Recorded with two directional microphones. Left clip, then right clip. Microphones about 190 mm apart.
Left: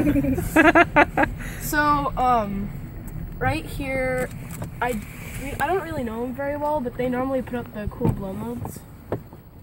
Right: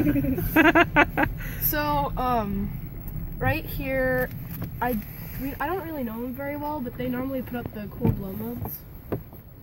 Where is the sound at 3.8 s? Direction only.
10° left (ahead or behind).